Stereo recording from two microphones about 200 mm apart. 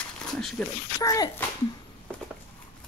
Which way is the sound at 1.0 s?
15° left (ahead or behind).